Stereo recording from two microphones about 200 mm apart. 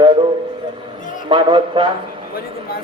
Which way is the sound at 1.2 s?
25° right (ahead or behind).